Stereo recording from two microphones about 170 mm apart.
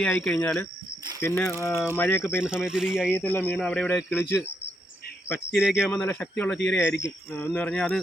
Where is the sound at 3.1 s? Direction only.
10° left (ahead or behind).